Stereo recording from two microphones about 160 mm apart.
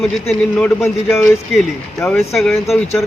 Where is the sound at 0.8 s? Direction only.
15° left (ahead or behind).